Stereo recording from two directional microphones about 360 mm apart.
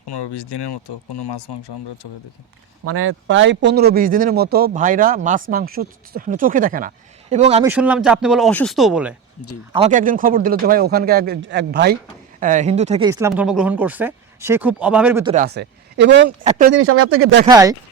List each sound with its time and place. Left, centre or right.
0.1 s speech: left
2.8 s speech: right; by 7.7 s centre
7.7 s speech: centre
9.7 s speech: centre
15.4 s speech: right
17.4 s speech: centre